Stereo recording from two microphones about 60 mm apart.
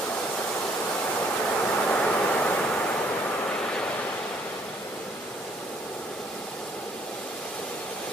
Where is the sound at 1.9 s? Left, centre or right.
Left.